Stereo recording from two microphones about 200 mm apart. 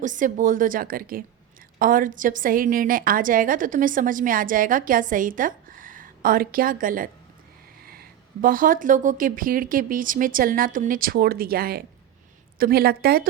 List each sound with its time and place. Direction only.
0.0 s a woman's voice: 40° right (ahead or behind)